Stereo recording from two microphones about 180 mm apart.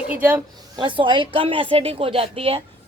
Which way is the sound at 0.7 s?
25° right (ahead or behind).